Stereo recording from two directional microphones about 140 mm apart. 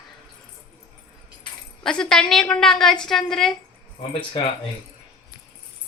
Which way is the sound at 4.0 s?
35° left (ahead or behind).